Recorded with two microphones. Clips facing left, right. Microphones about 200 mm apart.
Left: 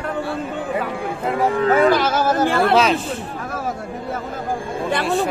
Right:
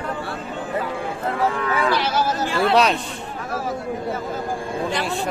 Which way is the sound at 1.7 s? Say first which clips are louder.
Left 6 dB; 50° left (ahead or behind).